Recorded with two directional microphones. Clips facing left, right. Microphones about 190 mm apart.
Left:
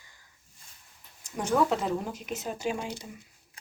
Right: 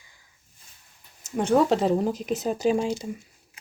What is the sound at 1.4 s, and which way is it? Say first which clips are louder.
Speech: right 6 dB; 30° right (ahead or behind).